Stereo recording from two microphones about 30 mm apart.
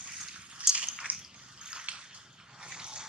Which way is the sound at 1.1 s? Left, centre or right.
Right.